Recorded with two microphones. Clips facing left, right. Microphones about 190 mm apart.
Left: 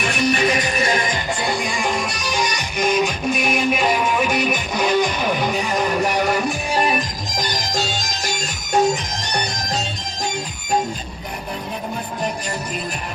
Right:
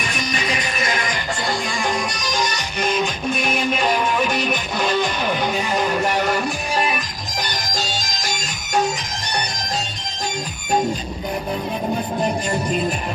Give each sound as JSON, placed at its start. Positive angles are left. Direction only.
{"t": 0.6, "sound": "music", "side_deg": 30}
{"t": 1.5, "sound": "music", "side_deg": 10}